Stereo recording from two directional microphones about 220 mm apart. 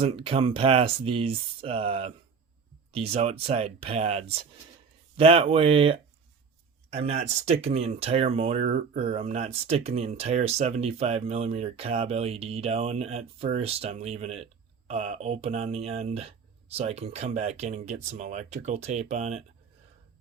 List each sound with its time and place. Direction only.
0.0 s speech: 25° right (ahead or behind)